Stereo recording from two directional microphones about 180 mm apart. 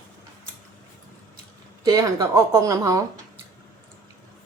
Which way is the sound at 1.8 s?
20° right (ahead or behind).